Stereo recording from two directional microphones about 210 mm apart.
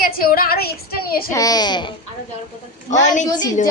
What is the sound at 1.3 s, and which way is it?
Speech, 15° left (ahead or behind).